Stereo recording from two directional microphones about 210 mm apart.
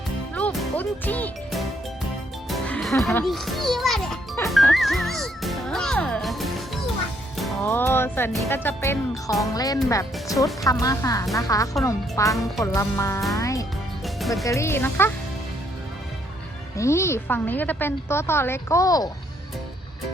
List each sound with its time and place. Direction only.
0.3 s music: 5° left (ahead or behind)
3.2 s a child's voice: centre (ahead or behind)
4.4 s music: centre (ahead or behind)
7.7 s a woman's voice: 10° left (ahead or behind)
13.3 s music: 15° left (ahead or behind)
14.0 s music: centre (ahead or behind)
14.4 s a woman's voice: 15° left (ahead or behind)
16.7 s a woman's voice: 15° left (ahead or behind)